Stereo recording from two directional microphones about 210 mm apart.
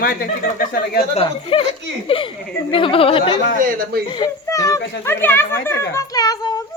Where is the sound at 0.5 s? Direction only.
45° left (ahead or behind).